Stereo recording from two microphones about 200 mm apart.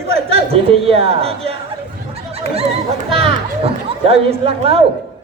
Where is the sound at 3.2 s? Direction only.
30° right (ahead or behind).